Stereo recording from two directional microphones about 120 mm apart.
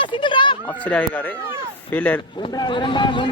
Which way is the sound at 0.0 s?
40° left (ahead or behind).